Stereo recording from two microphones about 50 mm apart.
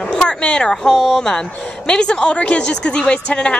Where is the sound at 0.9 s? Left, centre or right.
Centre.